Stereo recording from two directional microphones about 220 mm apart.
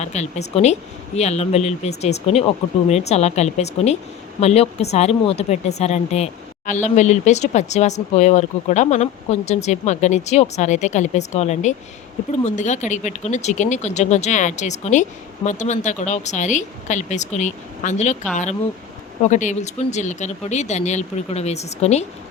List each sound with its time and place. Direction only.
0.0 s a woman's voice: 30° left (ahead or behind)